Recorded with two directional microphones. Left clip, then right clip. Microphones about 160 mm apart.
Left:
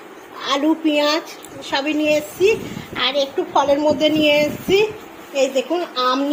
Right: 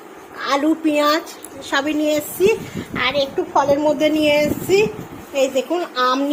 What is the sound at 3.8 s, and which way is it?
Speech, 20° right (ahead or behind).